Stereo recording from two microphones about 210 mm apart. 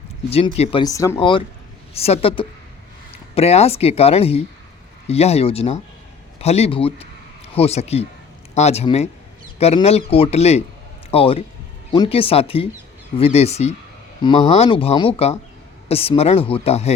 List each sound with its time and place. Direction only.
0.3 s speech: 30° left (ahead or behind)